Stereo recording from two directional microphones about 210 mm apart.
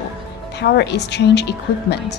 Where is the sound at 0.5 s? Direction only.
55° left (ahead or behind).